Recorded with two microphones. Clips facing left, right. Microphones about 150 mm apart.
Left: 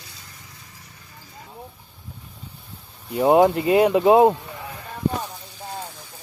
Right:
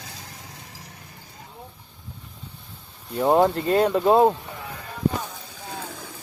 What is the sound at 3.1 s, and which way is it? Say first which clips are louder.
Speech: left 3 dB; 10° left (ahead or behind).